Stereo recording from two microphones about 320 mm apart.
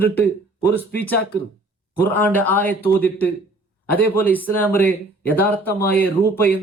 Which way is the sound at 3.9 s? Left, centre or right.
Centre.